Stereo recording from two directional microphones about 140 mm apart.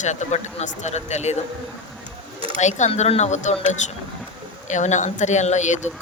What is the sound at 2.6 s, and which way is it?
Speech, 55° left (ahead or behind).